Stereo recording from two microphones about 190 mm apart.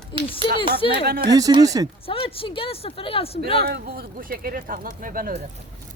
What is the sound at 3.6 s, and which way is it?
Speech, 55° right (ahead or behind).